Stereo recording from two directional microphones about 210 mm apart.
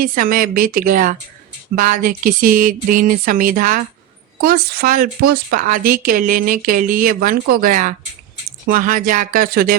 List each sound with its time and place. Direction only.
0.0 s a woman's voice: 40° right (ahead or behind)